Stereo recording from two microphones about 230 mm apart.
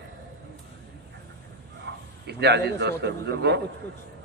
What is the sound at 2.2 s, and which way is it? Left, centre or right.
A man's voice, right.